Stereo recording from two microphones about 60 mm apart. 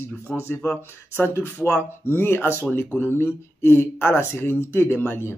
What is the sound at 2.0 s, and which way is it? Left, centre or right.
Speech, left.